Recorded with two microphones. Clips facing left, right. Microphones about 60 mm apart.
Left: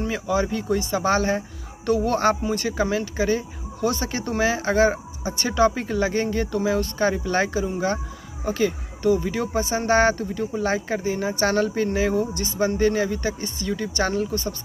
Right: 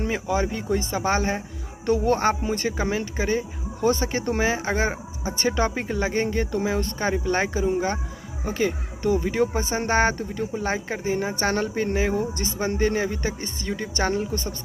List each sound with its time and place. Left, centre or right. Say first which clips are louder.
0.0 s speech: left 1 dB; right